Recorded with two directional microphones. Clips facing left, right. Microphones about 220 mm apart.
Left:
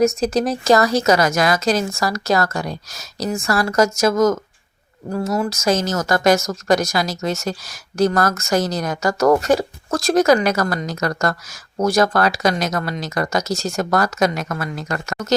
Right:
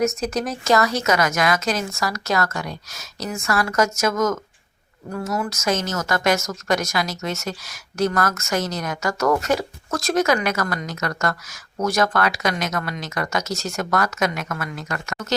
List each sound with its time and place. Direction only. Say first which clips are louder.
0.2 s speech: left 6 dB; 30° left (ahead or behind)